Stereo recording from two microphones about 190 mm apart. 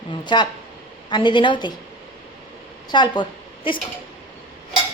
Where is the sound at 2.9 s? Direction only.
25° left (ahead or behind).